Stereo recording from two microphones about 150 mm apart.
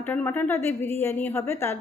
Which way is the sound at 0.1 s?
10° left (ahead or behind).